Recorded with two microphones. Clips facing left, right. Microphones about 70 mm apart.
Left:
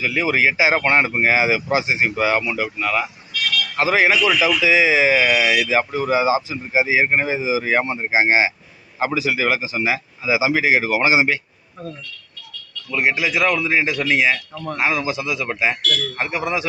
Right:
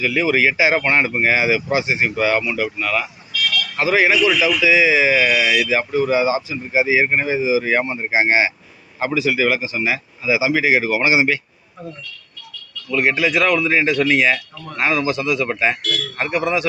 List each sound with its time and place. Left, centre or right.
0.1 s a man's voice: left
12.9 s speech: centre